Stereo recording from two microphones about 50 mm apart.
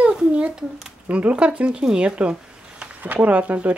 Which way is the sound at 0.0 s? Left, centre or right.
Centre.